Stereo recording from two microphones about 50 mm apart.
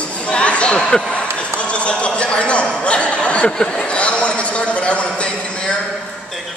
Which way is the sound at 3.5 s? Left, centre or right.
Centre.